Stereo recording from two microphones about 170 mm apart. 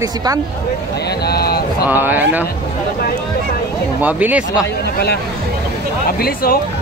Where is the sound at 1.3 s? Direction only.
65° left (ahead or behind).